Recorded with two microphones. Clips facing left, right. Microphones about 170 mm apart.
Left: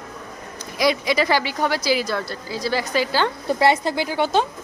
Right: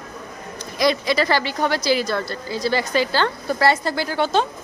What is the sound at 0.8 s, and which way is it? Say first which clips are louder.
A woman's voice: even; 10° left (ahead or behind).